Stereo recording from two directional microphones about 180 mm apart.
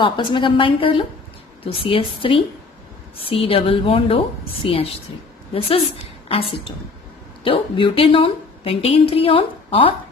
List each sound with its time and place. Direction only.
0.0 s a woman's voice: 25° left (ahead or behind)
3.4 s a woman's voice: 30° left (ahead or behind)
7.4 s a woman's voice: 30° left (ahead or behind)